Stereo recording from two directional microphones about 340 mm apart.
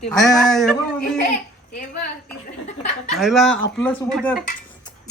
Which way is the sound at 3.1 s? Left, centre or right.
Centre.